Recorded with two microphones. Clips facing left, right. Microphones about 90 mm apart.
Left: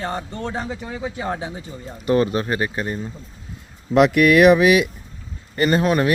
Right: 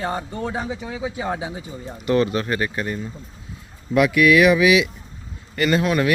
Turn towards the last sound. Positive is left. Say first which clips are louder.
# left 1 dB
turn(degrees=35)  # may be behind; listen again after turning